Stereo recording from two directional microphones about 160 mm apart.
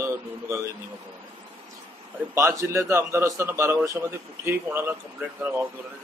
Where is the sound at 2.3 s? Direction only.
20° right (ahead or behind).